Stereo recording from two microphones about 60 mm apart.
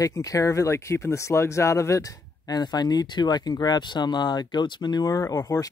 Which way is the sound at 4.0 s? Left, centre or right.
Left.